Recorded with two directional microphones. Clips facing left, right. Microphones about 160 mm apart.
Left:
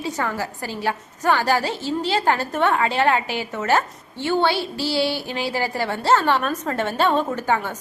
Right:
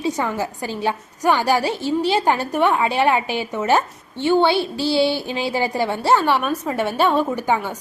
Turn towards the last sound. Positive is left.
turn(degrees=-15)  # may be behind; listen again after turning